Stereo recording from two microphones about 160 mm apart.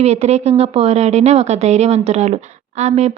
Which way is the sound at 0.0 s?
40° right (ahead or behind).